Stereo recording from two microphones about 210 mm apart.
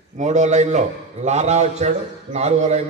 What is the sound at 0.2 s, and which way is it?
A man's voice, 35° right (ahead or behind).